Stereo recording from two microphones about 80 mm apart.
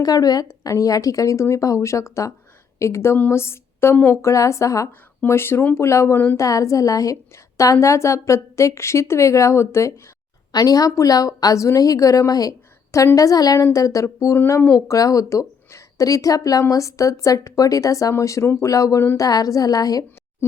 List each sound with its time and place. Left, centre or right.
0.0 s a woman's voice: left
4.9 s a woman's voice: left
10.5 s a woman's voice: left
14.3 s speech: left
14.8 s a woman's voice: left
18.7 s a woman's voice: left